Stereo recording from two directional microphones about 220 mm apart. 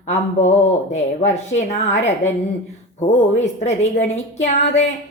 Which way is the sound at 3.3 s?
30° left (ahead or behind).